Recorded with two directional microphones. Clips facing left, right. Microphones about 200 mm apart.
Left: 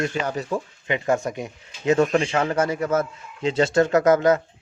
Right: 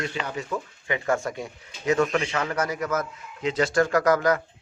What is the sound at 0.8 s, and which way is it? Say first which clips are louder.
Speech: left 3 dB; 20° left (ahead or behind).